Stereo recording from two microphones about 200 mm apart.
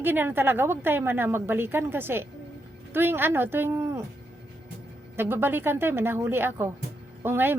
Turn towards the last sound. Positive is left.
turn(degrees=-10)  # may be behind; listen again after turning